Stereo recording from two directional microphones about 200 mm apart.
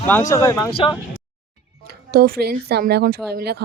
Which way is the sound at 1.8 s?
50° right (ahead or behind).